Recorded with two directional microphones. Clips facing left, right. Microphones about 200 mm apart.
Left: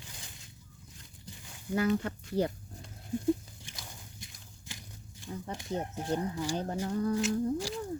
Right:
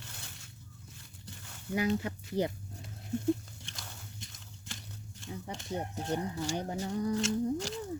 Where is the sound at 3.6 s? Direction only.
15° left (ahead or behind).